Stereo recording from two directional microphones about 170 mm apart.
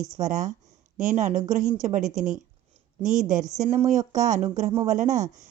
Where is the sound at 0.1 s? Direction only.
45° right (ahead or behind).